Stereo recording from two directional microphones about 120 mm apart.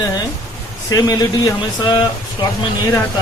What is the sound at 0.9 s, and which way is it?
Speech, 35° left (ahead or behind).